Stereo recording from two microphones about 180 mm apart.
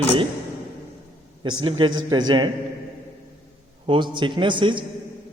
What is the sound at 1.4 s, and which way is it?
A man's voice, 25° right (ahead or behind).